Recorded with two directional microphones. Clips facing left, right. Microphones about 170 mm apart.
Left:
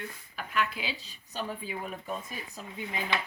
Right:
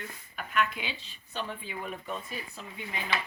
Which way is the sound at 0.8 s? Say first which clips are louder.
Left 2 dB; 40° left (ahead or behind).